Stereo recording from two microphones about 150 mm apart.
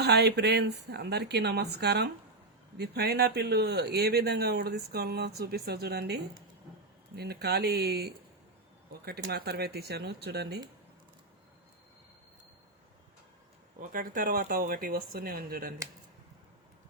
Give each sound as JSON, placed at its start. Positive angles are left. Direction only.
{"t": 0.0, "sound": "speech", "side_deg": -90}
{"t": 13.9, "sound": "speech", "side_deg": -65}